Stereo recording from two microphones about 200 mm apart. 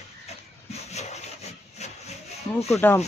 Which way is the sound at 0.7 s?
35° left (ahead or behind).